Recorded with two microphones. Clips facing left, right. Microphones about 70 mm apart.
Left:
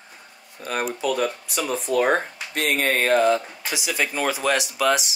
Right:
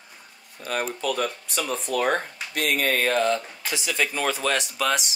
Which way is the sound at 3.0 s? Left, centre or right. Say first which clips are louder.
Left 4 dB; centre.